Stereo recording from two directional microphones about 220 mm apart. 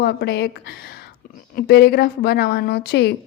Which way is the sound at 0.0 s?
50° left (ahead or behind).